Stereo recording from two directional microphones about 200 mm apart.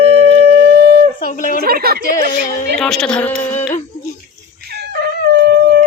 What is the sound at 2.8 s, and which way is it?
Speech, 5° left (ahead or behind).